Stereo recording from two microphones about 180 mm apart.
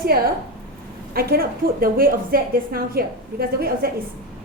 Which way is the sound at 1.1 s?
55° right (ahead or behind).